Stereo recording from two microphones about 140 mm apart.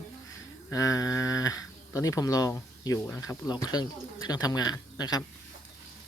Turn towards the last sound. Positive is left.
turn(degrees=30)  # may be behind; listen again after turning